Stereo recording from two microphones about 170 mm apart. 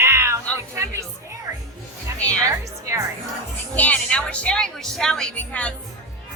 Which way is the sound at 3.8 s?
10° left (ahead or behind).